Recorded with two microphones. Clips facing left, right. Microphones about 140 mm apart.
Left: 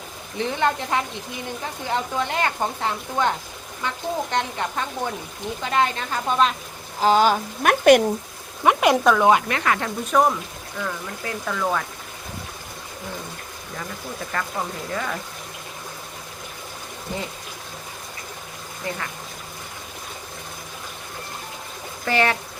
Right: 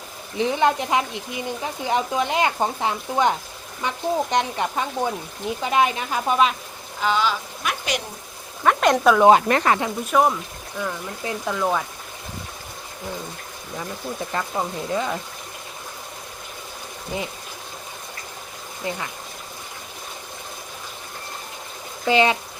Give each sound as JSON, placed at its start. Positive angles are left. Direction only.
{"t": 0.3, "sound": "speech", "side_deg": -15}
{"t": 7.0, "sound": "speech", "side_deg": 45}
{"t": 8.6, "sound": "speech", "side_deg": 10}
{"t": 9.5, "sound": "speech", "side_deg": -35}
{"t": 10.1, "sound": "speech", "side_deg": -5}
{"t": 10.8, "sound": "speech", "side_deg": -15}
{"t": 14.3, "sound": "speech", "side_deg": -20}
{"t": 17.1, "sound": "speech", "side_deg": -15}
{"t": 18.8, "sound": "speech", "side_deg": -20}
{"t": 22.0, "sound": "speech", "side_deg": -15}